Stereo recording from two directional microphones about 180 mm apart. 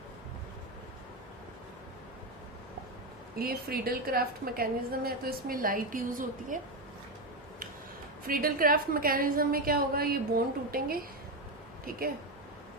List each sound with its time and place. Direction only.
3.3 s a woman's voice: 55° right (ahead or behind)
8.3 s a woman's voice: 55° right (ahead or behind)